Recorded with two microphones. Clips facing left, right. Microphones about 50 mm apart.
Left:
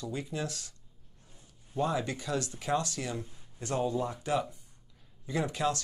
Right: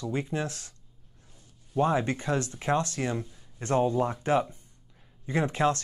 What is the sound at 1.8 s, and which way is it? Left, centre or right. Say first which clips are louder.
Speech: right 6 dB; right.